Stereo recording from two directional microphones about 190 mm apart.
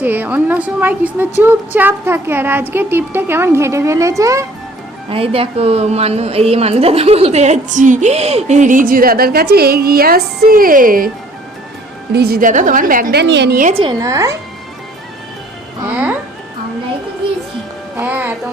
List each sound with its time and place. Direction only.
0.0 s a woman's voice: 10° right (ahead or behind)
5.0 s a woman's voice: 30° right (ahead or behind); by 11.1 s 45° right (ahead or behind)
12.1 s a woman's voice: 55° right (ahead or behind)
14.0 s a woman's voice: 15° right (ahead or behind)
17.9 s speech: 10° right (ahead or behind)